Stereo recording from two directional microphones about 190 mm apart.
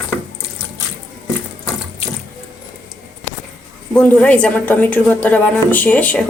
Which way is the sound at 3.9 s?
5° left (ahead or behind).